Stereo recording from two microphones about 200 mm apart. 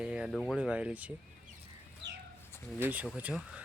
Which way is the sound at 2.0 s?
60° right (ahead or behind).